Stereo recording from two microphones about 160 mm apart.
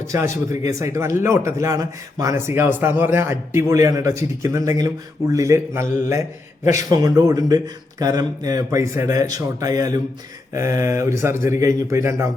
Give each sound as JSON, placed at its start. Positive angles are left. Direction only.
{"t": 0.6, "sound": "a man's voice", "side_deg": -20}